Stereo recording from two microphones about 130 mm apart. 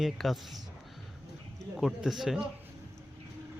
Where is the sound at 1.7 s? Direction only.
Centre (ahead or behind).